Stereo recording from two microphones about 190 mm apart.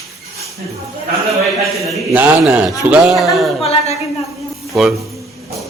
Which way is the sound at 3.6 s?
30° left (ahead or behind).